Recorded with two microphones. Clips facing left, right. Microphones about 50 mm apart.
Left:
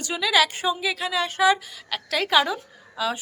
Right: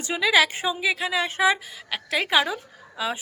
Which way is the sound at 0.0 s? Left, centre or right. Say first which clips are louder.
Right 1 dB; right.